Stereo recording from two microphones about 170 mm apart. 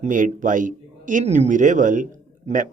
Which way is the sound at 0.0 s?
50° right (ahead or behind).